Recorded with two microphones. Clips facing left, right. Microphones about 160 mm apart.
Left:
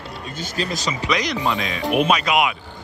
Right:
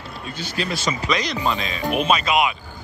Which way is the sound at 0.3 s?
45° left (ahead or behind).